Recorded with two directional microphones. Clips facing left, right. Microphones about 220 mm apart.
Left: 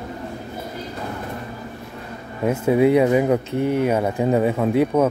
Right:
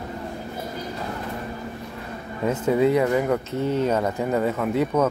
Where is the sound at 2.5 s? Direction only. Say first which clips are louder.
Left 3 dB; 10° left (ahead or behind).